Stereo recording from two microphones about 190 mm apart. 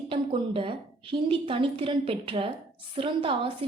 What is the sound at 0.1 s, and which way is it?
A woman's voice, 25° right (ahead or behind).